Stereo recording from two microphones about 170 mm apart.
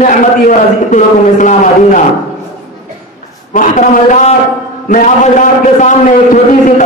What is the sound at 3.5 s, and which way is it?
A man's voice, 50° left (ahead or behind).